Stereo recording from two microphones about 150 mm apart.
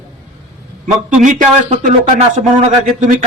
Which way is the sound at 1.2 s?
60° right (ahead or behind).